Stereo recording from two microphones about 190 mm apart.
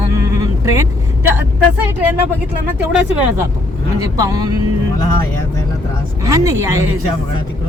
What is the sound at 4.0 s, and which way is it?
Speech, 20° right (ahead or behind).